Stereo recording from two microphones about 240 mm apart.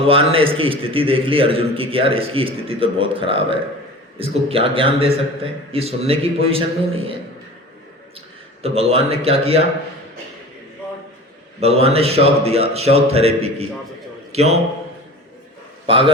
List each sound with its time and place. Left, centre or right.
0.0 s a man's voice: right
8.6 s a man's voice: right
11.6 s a man's voice: right
15.9 s a man's voice: right